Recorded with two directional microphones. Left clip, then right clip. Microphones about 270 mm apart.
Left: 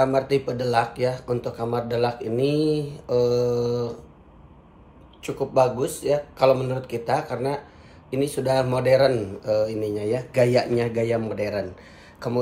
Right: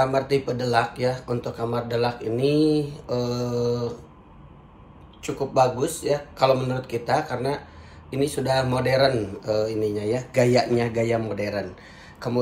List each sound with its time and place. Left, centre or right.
0.0 s speech: centre
5.2 s speech: centre